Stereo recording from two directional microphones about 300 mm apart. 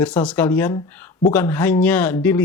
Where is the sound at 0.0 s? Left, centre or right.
Centre.